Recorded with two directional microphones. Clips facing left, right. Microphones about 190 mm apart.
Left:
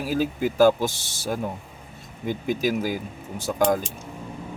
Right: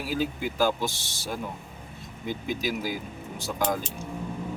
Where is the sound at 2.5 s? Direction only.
50° left (ahead or behind).